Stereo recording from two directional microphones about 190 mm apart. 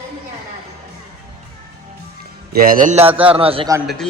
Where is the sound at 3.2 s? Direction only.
30° right (ahead or behind).